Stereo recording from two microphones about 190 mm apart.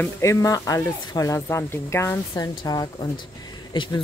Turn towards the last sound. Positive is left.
turn(degrees=25)  # may be behind; listen again after turning